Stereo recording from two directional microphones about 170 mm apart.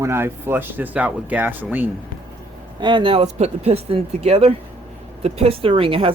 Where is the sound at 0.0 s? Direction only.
15° right (ahead or behind).